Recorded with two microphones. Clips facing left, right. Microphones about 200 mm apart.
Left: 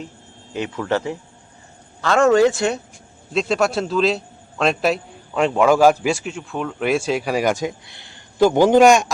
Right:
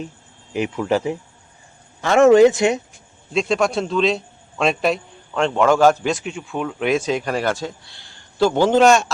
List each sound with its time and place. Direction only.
0.5 s speech: 15° right (ahead or behind)
3.3 s a man's voice: 5° left (ahead or behind)